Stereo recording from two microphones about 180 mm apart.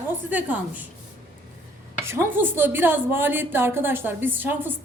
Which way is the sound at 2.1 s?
10° right (ahead or behind).